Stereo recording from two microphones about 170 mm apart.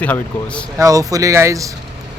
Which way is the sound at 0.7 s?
20° right (ahead or behind).